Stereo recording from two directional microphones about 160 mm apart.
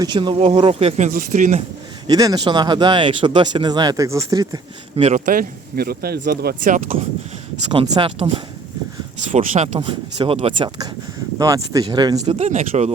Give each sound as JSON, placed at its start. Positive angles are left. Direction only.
{"t": 0.0, "sound": "speech", "side_deg": -30}
{"t": 2.0, "sound": "speech", "side_deg": -25}
{"t": 4.9, "sound": "speech", "side_deg": -45}
{"t": 5.2, "sound": "speech", "side_deg": -60}
{"t": 7.7, "sound": "speech", "side_deg": -30}
{"t": 9.3, "sound": "speech", "side_deg": -50}
{"t": 9.7, "sound": "speech", "side_deg": -30}
{"t": 11.3, "sound": "speech", "side_deg": -20}
{"t": 12.2, "sound": "speech", "side_deg": -45}